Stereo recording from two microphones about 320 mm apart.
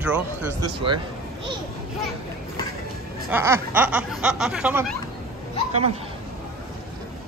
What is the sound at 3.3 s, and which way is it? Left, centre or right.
Speech, centre.